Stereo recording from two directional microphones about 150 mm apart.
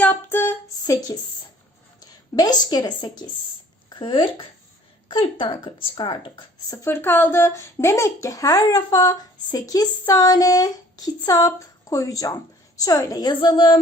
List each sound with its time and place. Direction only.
0.0 s female singing: 10° left (ahead or behind)
2.0 s speech: 25° left (ahead or behind)
6.8 s speech: 15° left (ahead or behind); by 13.7 s 35° left (ahead or behind)